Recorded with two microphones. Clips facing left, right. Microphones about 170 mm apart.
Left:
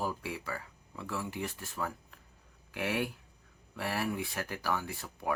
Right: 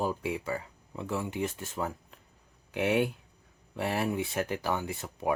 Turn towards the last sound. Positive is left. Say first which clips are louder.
# right 4 dB
turn(degrees=-20)  # may be behind; listen again after turning